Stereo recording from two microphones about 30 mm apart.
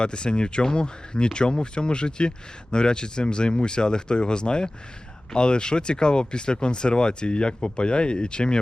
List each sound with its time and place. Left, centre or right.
0.0 s speech: left